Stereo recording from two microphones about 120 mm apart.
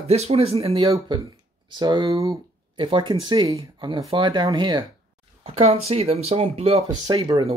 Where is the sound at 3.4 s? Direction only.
30° right (ahead or behind).